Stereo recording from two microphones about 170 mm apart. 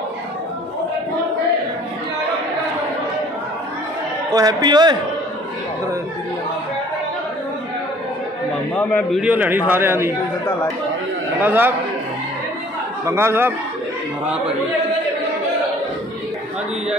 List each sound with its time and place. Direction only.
4.3 s a man's voice: 25° right (ahead or behind)
8.7 s a man's voice: 10° left (ahead or behind)
9.2 s speech: 10° right (ahead or behind)
11.3 s speech: 10° right (ahead or behind)
13.0 s speech: 15° right (ahead or behind)